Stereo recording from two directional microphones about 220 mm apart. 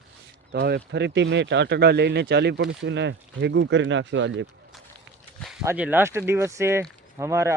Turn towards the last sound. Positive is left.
turn(degrees=-15)  # may be behind; listen again after turning